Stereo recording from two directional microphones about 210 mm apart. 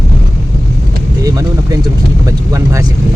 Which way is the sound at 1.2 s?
15° right (ahead or behind).